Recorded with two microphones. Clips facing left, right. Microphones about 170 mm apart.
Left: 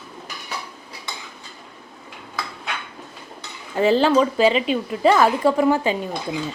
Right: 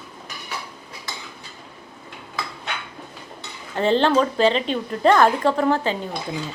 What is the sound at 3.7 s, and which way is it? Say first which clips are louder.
A woman's voice: left 2 dB; 5° left (ahead or behind).